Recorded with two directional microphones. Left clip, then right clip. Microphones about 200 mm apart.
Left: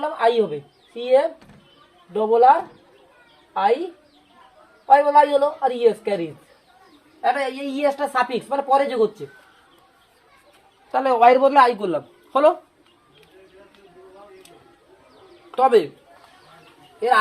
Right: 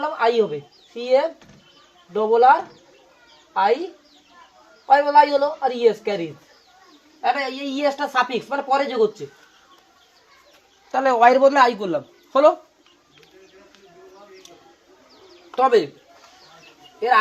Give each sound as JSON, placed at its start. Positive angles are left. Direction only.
{"t": 0.0, "sound": "speech", "side_deg": 0}
{"t": 4.9, "sound": "speech", "side_deg": 0}
{"t": 10.9, "sound": "speech", "side_deg": -25}
{"t": 15.5, "sound": "speech", "side_deg": -25}